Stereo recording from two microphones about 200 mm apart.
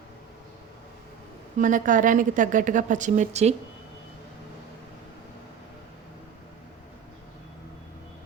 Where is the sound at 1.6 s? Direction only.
40° right (ahead or behind).